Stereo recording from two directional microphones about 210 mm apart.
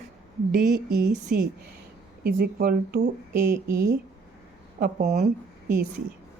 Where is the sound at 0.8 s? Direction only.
45° right (ahead or behind).